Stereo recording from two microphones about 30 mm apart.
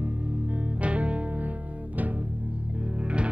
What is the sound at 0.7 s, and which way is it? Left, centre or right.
Music, right.